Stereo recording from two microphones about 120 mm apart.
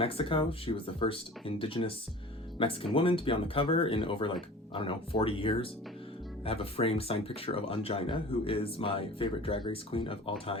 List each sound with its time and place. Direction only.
0.0 s speech: 50° left (ahead or behind)